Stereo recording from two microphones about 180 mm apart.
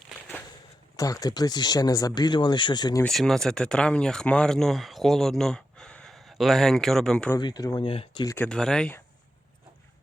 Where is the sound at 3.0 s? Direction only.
5° left (ahead or behind).